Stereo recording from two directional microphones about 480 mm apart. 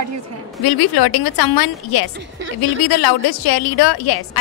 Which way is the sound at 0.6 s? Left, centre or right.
Left.